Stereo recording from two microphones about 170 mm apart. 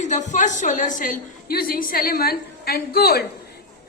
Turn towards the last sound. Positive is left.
turn(degrees=65)  # may be behind; listen again after turning